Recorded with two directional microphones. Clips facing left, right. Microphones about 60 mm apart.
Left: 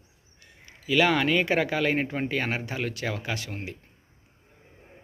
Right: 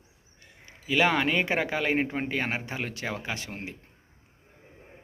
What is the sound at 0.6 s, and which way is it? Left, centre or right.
Speech, right.